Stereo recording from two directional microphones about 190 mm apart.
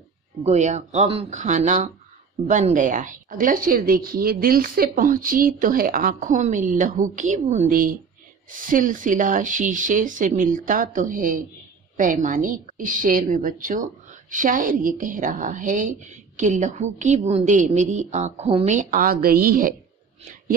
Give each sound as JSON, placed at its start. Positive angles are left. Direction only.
{"t": 0.4, "sound": "a woman's voice", "side_deg": -35}